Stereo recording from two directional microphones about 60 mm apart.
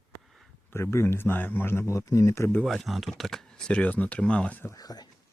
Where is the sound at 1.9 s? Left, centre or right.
Left.